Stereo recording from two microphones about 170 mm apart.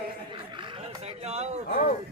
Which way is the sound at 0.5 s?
35° right (ahead or behind).